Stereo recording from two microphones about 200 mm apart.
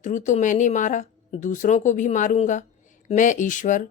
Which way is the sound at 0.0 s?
40° left (ahead or behind).